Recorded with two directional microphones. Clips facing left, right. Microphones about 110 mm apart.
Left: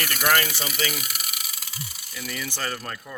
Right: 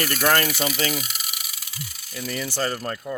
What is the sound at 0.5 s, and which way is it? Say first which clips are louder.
Speech: right 4 dB; 40° right (ahead or behind).